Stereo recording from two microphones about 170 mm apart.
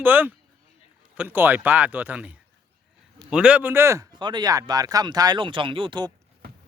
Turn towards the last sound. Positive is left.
turn(degrees=-25)  # may be behind; listen again after turning